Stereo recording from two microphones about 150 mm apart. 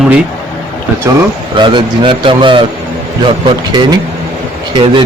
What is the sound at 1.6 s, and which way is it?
A man's voice, 30° right (ahead or behind).